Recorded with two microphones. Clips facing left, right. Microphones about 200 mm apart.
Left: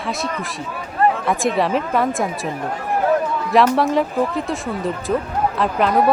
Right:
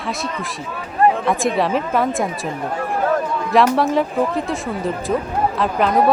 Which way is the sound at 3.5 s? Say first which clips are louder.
Even; centre (ahead or behind).